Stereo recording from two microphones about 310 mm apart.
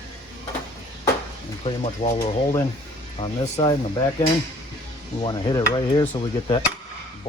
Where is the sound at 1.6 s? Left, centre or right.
Left.